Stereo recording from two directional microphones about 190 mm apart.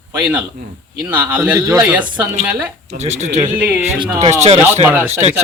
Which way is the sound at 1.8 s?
5° right (ahead or behind).